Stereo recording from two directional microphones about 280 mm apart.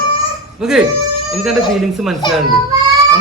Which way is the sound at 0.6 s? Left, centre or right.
Centre.